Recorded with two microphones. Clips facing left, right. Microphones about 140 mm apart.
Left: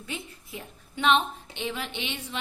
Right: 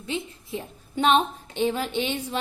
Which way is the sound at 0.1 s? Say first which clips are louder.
Right 8 dB; 25° right (ahead or behind).